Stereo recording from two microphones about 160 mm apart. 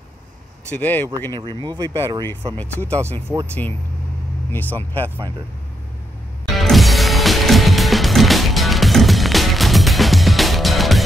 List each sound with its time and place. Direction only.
0.7 s speech: 10° left (ahead or behind)
1.3 s speech: 30° right (ahead or behind)
2.5 s speech: 10° left (ahead or behind)
3.0 s speech: 15° right (ahead or behind)
4.7 s speech: 10° left (ahead or behind)
6.5 s music: centre (ahead or behind)